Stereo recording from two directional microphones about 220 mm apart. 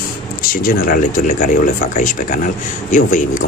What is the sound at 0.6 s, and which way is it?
Speech, 40° left (ahead or behind).